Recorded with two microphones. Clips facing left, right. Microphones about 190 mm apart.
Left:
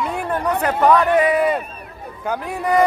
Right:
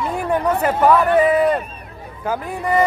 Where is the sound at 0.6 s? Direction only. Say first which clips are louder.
Left 1 dB; 5° right (ahead or behind).